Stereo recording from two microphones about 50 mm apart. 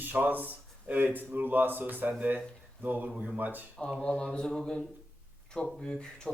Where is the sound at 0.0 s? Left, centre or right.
Right.